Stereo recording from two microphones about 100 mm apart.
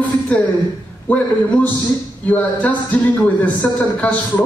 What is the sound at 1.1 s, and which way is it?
Speech, 15° left (ahead or behind).